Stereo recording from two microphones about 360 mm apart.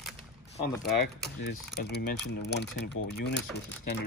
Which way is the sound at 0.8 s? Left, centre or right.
Left.